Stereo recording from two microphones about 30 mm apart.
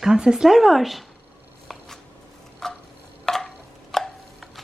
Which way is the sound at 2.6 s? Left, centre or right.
Centre.